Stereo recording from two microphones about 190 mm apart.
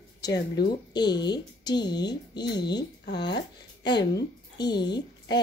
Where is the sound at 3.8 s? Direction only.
20° left (ahead or behind).